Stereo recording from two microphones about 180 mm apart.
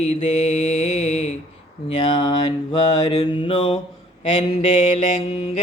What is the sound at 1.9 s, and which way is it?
Mantra, 25° left (ahead or behind).